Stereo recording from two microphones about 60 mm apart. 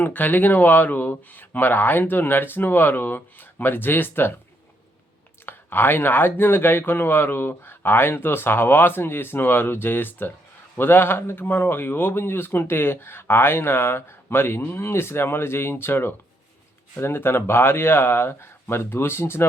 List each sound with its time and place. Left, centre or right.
0.0 s speech: left
5.5 s speech: left